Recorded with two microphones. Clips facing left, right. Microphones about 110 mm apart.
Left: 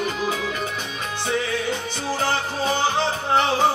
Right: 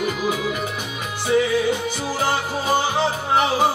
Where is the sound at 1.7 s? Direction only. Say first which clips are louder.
Right 3 dB; 10° right (ahead or behind).